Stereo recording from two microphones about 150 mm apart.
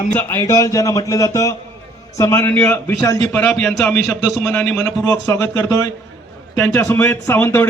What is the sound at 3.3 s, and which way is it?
A man's voice, 5° left (ahead or behind).